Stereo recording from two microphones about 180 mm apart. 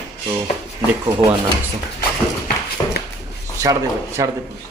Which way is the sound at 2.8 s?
15° left (ahead or behind).